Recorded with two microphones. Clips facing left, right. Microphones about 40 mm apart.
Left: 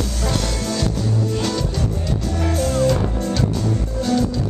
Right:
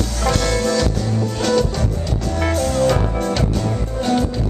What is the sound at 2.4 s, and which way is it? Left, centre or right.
Music, right.